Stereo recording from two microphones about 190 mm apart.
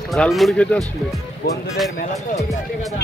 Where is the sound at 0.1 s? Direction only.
Centre (ahead or behind).